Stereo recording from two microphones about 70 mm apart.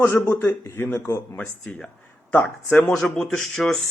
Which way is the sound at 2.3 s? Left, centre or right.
Left.